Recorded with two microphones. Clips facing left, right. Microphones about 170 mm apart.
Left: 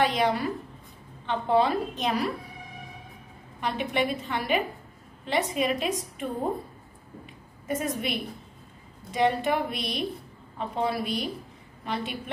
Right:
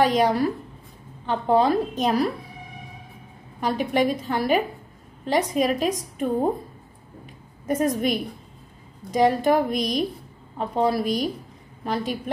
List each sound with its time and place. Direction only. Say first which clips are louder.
0.0 s a woman's voice: right 5 dB; 40° right (ahead or behind)
3.6 s a woman's voice: right 5 dB; 40° right (ahead or behind)
7.2 s a woman's voice: right 6 dB; 45° right (ahead or behind)